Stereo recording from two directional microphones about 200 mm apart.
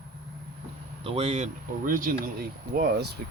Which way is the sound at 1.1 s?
30° right (ahead or behind).